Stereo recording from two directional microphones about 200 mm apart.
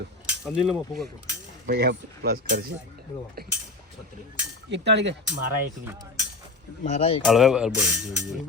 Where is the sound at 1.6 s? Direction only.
55° right (ahead or behind).